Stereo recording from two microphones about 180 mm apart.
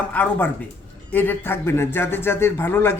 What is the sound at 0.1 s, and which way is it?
A man's voice, 10° left (ahead or behind).